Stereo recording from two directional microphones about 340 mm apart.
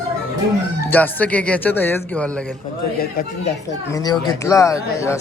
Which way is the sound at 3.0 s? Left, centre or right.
Left.